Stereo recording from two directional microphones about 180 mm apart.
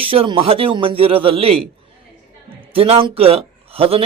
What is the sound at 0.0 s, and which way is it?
Speech, 30° right (ahead or behind).